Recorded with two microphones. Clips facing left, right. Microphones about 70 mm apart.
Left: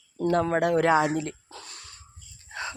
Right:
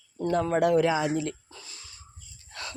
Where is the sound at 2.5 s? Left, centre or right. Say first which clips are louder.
Left 5 dB; left.